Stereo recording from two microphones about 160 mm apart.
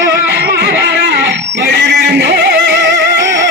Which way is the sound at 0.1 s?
90° right.